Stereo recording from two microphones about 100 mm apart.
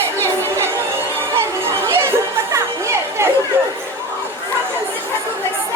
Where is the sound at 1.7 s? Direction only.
25° right (ahead or behind).